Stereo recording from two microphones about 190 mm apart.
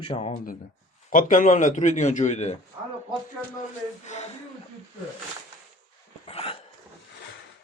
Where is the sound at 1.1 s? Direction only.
45° left (ahead or behind).